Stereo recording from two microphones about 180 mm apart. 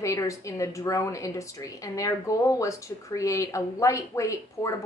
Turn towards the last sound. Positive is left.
turn(degrees=15)  # may be behind; listen again after turning